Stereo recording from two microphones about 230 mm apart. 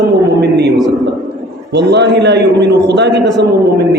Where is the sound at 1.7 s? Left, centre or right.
Right.